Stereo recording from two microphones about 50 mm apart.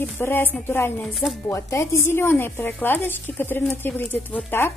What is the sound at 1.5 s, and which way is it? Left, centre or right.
A woman's voice, left.